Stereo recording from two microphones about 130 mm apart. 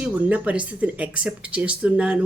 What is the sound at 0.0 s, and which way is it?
Speech, 10° right (ahead or behind).